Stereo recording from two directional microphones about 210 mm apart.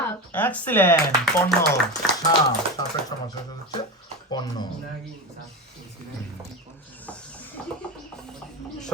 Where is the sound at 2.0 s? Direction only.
Centre (ahead or behind).